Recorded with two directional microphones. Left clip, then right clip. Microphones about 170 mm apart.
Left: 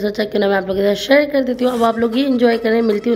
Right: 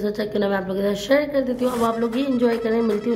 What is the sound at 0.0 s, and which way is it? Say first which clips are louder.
A woman's voice: left 6 dB; 20° left (ahead or behind).